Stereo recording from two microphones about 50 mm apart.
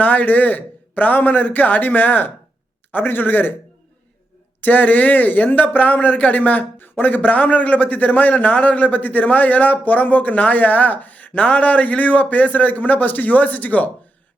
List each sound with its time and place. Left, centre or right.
0.0 s speech: left
4.6 s speech: left